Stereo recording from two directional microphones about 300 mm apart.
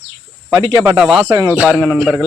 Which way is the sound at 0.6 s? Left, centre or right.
Centre.